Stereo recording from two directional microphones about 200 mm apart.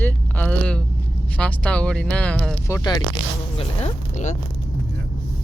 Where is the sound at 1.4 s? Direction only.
5° left (ahead or behind).